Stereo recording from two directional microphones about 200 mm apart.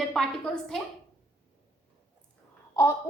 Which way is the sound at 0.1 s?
5° left (ahead or behind).